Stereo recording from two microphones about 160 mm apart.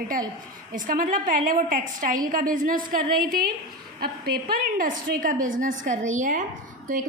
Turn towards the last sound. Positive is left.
turn(degrees=-55)  # may be behind; listen again after turning